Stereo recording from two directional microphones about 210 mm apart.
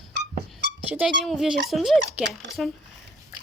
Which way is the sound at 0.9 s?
5° right (ahead or behind).